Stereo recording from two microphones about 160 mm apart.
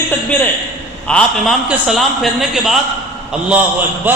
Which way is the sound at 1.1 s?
5° left (ahead or behind).